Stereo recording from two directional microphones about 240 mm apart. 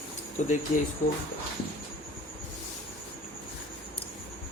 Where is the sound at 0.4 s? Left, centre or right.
Left.